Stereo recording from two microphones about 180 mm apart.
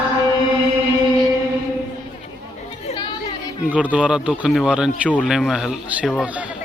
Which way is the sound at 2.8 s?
25° left (ahead or behind).